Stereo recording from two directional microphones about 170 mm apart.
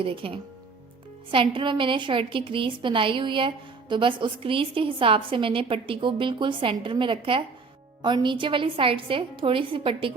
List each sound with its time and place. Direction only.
0.0 s a woman's voice: 30° right (ahead or behind)